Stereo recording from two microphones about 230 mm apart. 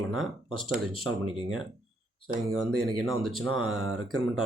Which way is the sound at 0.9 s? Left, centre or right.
Right.